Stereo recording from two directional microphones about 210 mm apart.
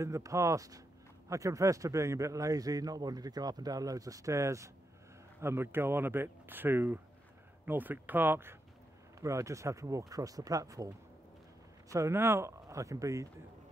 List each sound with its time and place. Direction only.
0.0 s a man's voice: 15° right (ahead or behind)
11.9 s a man's voice: 15° right (ahead or behind)